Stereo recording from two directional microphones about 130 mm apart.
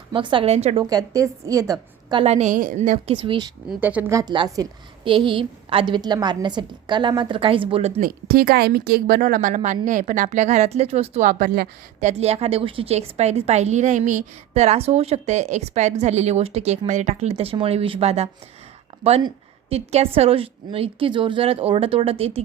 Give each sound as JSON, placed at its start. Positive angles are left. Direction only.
{"t": 0.1, "sound": "a woman's voice", "side_deg": -40}
{"t": 0.5, "sound": "a woman's voice", "side_deg": -55}
{"t": 0.9, "sound": "a woman's voice", "side_deg": -25}
{"t": 2.1, "sound": "a woman's voice", "side_deg": -55}
{"t": 3.1, "sound": "a woman's voice", "side_deg": -40}
{"t": 3.8, "sound": "speech", "side_deg": -15}
{"t": 4.1, "sound": "a woman's voice", "side_deg": -30}
{"t": 5.0, "sound": "a woman's voice", "side_deg": -40}
{"t": 9.0, "sound": "speech", "side_deg": -90}
{"t": 9.8, "sound": "a woman's voice", "side_deg": -70}
{"t": 11.3, "sound": "speech", "side_deg": -90}
{"t": 11.9, "sound": "a woman's voice", "side_deg": -60}
{"t": 19.7, "sound": "a woman's voice", "side_deg": -55}